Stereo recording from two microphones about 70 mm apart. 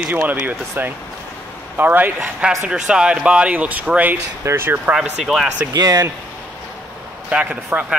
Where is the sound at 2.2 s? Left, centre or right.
Centre.